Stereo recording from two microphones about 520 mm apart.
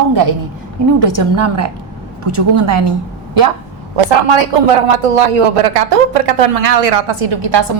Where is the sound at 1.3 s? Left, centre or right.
Right.